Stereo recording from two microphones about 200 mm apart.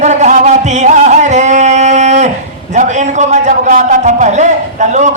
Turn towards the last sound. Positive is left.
turn(degrees=-35)  # may be behind; listen again after turning